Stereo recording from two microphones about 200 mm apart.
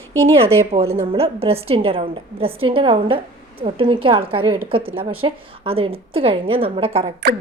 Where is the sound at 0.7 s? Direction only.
30° right (ahead or behind).